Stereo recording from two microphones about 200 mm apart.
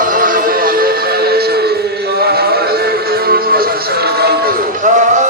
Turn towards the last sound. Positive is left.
turn(degrees=-40)  # may be behind; listen again after turning